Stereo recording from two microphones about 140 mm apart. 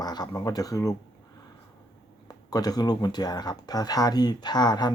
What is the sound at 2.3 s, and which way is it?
Speech, 25° left (ahead or behind).